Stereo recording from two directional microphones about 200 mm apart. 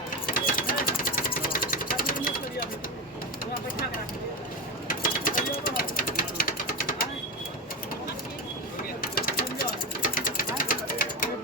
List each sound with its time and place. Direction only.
0.3 s sewing machine: 45° left (ahead or behind)
4.9 s a sound: 45° left (ahead or behind)
9.0 s sewing machine: 45° left (ahead or behind)